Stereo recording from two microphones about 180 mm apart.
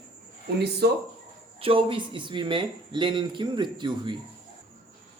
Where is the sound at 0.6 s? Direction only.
65° right (ahead or behind).